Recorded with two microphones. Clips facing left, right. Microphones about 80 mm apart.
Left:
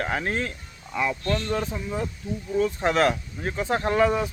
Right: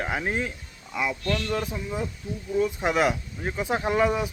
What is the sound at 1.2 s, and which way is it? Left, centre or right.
Speech, left.